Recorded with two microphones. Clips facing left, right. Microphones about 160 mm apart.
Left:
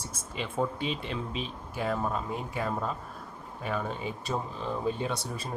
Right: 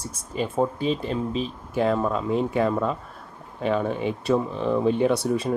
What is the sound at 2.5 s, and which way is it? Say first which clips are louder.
Speech: right 9 dB; 60° right (ahead or behind).